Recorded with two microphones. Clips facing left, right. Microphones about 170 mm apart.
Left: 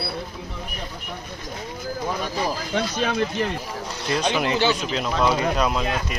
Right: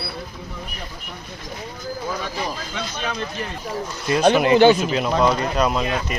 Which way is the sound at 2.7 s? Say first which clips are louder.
Left 5 dB; 55° left (ahead or behind).